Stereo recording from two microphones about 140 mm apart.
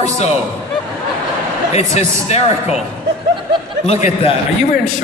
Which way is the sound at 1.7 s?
50° left (ahead or behind).